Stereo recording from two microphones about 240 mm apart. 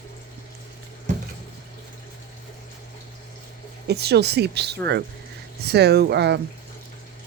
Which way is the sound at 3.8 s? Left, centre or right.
Right.